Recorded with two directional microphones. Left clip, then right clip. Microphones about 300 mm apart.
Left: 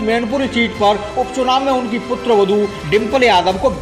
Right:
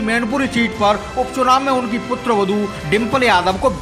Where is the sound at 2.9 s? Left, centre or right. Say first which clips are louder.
Left 1 dB; centre.